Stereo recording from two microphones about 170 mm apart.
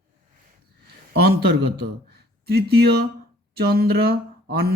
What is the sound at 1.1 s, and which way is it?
A man's voice, 70° right (ahead or behind).